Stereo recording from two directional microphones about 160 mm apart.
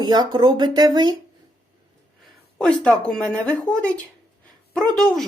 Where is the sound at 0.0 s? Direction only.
25° right (ahead or behind).